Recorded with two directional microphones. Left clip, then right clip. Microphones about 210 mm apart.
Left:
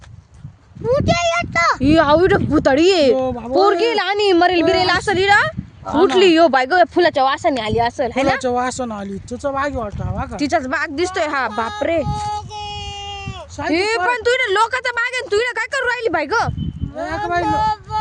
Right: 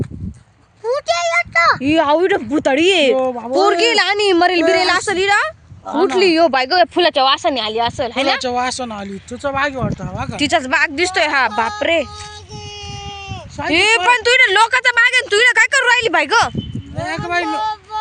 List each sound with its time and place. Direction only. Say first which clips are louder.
0.9 s a sound: left 1 dB; 50° right (ahead or behind)
1.8 s speech: left 1 dB; 5° left (ahead or behind)
3.2 s speech: right 2 dB; 20° right (ahead or behind)
3.6 s a woman's voice: right 2 dB; 5° right (ahead or behind); by 8.4 s 20° left (ahead or behind)
8.4 s speech: even; 35° left (ahead or behind)
9.4 s a woman's voice: right 2 dB; 10° left (ahead or behind)
13.7 s a woman's voice: right 5 dB; 5° left (ahead or behind)
17.0 s speech: even; 20° left (ahead or behind)
17.6 s a sound: left 2 dB; centre (ahead or behind)